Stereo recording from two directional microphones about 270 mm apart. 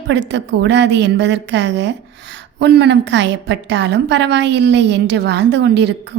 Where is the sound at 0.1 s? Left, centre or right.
Right.